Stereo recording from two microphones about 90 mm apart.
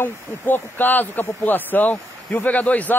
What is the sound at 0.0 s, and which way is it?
Speech, 20° left (ahead or behind).